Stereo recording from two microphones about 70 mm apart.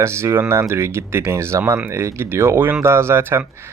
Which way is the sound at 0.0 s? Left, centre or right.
Right.